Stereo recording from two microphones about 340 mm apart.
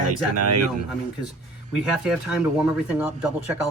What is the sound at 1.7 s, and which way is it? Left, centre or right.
Speech, centre.